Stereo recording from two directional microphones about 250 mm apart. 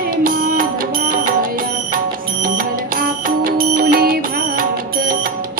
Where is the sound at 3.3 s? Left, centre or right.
Right.